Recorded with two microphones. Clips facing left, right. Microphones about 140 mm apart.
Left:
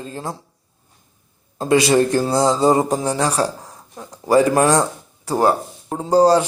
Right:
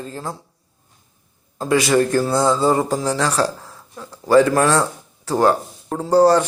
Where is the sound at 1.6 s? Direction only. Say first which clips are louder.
Left 2 dB; 20° left (ahead or behind).